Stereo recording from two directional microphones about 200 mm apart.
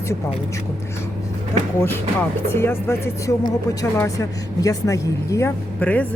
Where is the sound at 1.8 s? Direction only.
10° left (ahead or behind).